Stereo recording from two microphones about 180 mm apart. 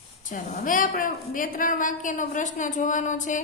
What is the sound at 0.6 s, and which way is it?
A woman's voice, 50° left (ahead or behind).